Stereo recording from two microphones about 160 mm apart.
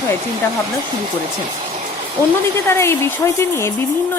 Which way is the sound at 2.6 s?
15° left (ahead or behind).